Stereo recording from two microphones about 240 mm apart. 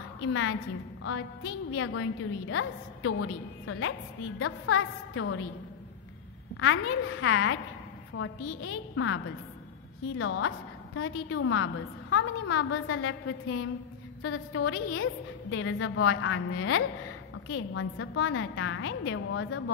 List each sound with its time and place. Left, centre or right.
0.2 s a woman's voice: left
6.5 s a woman's voice: left